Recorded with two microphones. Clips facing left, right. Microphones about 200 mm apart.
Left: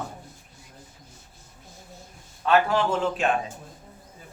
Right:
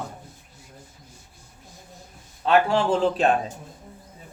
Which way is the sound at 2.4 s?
30° right (ahead or behind).